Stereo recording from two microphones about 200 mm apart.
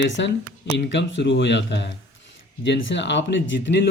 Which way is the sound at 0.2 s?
65° left (ahead or behind).